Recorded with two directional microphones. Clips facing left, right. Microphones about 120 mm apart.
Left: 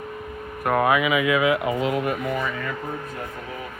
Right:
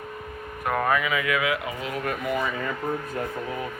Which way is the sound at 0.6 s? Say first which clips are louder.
Left 4 dB; 10° left (ahead or behind).